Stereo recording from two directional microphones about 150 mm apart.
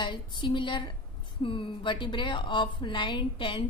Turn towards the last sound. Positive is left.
turn(degrees=35)  # may be behind; listen again after turning